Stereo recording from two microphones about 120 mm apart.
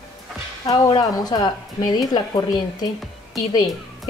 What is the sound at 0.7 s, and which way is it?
A woman's voice, 35° left (ahead or behind).